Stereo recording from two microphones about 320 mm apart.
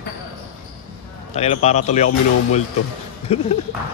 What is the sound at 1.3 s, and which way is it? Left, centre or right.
Speech, centre.